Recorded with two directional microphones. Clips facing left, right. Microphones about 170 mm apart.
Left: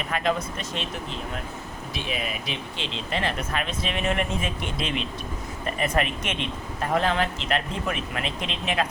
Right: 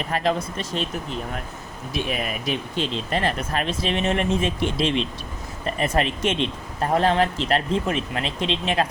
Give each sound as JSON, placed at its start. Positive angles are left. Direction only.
{"t": 0.1, "sound": "speech", "side_deg": -35}
{"t": 1.9, "sound": "speech", "side_deg": -50}